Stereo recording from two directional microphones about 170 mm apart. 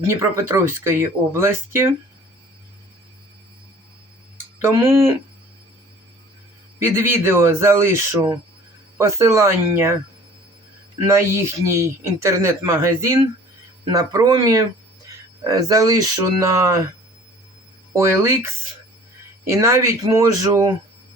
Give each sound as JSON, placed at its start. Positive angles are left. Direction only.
{"t": 0.0, "sound": "speech", "side_deg": -15}
{"t": 4.6, "sound": "speech", "side_deg": -15}
{"t": 6.7, "sound": "a man's voice", "side_deg": -15}
{"t": 11.0, "sound": "speech", "side_deg": -15}
{"t": 17.9, "sound": "speech", "side_deg": -15}